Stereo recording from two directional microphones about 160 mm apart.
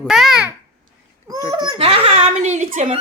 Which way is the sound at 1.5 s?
30° right (ahead or behind).